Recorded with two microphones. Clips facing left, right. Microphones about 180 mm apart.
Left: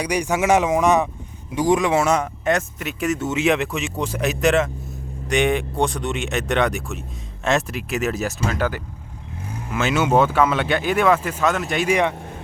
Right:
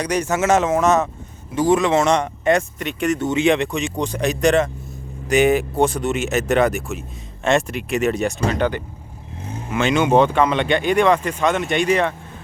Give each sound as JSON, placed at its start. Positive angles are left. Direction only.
{"t": 0.0, "sound": "speech", "side_deg": 10}
{"t": 9.4, "sound": "vehicle", "side_deg": -25}
{"t": 9.7, "sound": "speech", "side_deg": 5}